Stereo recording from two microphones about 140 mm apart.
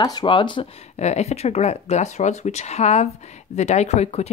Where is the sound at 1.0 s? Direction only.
50° left (ahead or behind).